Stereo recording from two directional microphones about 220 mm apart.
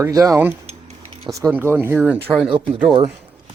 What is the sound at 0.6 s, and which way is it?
Mechanisms, 30° right (ahead or behind).